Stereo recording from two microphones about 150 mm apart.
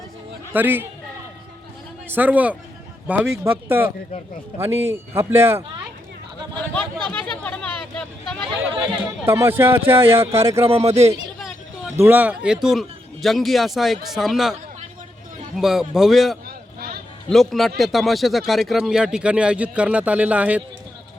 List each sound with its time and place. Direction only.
0.5 s a man's voice: 15° right (ahead or behind)
2.0 s a man's voice: 10° right (ahead or behind)
7.1 s a sound: 10° left (ahead or behind)
8.6 s a man's voice: 15° right (ahead or behind)
10.6 s speech: 40° right (ahead or behind)
11.9 s a man's voice: 15° right (ahead or behind)
15.5 s a man's voice: centre (ahead or behind)